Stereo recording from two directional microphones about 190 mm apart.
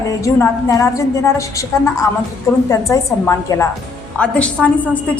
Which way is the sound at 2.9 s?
15° left (ahead or behind).